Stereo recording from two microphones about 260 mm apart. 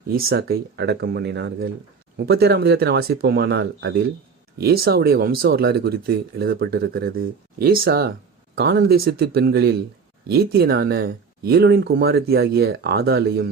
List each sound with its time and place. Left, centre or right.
0.1 s speech: right